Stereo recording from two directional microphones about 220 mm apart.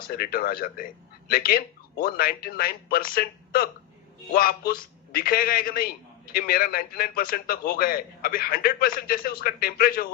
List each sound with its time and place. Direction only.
0.0 s a man's voice: 40° left (ahead or behind)